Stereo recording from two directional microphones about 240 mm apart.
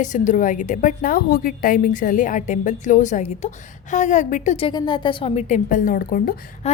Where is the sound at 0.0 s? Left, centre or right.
Left.